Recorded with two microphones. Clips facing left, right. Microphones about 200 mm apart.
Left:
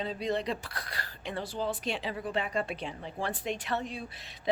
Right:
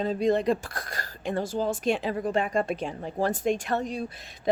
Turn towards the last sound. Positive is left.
turn(degrees=-45)  # may be behind; listen again after turning